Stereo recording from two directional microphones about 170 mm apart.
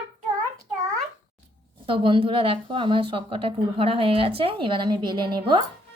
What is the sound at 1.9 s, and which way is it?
Speech, 30° right (ahead or behind).